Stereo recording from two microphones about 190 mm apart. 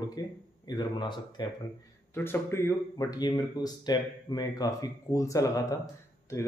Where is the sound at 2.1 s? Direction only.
10° left (ahead or behind).